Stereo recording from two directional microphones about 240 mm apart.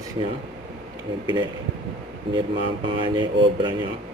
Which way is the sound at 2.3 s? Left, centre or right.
Right.